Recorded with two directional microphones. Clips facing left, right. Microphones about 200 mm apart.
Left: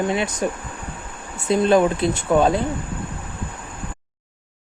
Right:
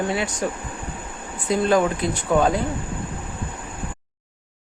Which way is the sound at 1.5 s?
25° left (ahead or behind).